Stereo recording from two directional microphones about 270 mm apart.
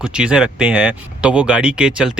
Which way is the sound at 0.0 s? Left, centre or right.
Centre.